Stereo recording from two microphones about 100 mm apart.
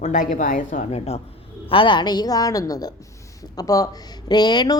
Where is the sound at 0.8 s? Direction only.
90° left.